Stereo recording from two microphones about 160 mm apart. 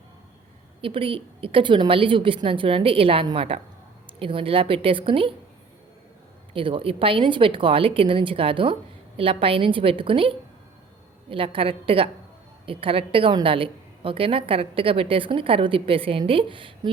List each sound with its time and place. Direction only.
0.8 s a woman's voice: 35° right (ahead or behind)
6.5 s a woman's voice: 35° right (ahead or behind)